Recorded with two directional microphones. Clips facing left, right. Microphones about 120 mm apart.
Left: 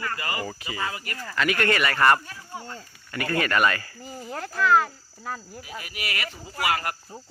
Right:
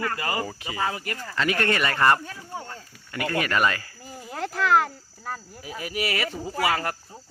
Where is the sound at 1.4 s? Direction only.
30° right (ahead or behind).